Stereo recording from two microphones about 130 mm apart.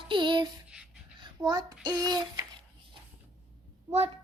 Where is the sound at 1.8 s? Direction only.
30° right (ahead or behind).